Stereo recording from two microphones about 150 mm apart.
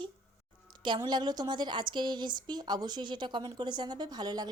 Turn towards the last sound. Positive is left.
turn(degrees=-25)  # may be behind; listen again after turning